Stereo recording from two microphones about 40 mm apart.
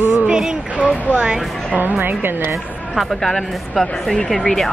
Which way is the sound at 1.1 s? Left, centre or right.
Right.